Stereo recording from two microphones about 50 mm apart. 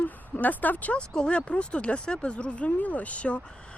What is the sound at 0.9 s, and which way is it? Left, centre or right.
Speech, centre.